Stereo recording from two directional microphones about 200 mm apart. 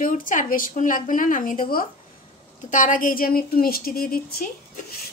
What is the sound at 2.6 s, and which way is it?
Speech, 40° left (ahead or behind).